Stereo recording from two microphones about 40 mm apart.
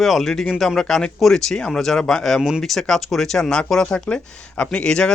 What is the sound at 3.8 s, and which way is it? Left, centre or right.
Speech, left.